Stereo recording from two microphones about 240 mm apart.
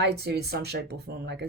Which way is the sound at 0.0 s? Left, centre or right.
Right.